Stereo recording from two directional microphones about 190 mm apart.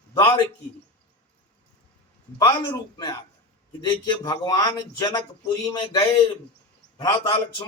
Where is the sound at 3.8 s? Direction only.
20° left (ahead or behind).